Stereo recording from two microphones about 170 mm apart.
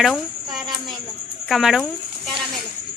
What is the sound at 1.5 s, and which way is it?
Speech, centre (ahead or behind).